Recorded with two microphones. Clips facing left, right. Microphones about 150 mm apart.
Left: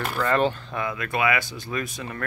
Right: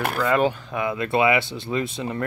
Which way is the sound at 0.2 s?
10° right (ahead or behind).